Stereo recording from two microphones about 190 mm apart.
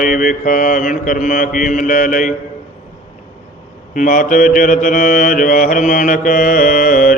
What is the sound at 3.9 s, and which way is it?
Mantra, 45° left (ahead or behind).